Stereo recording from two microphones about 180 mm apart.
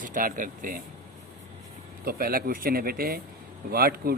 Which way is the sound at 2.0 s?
55° right (ahead or behind).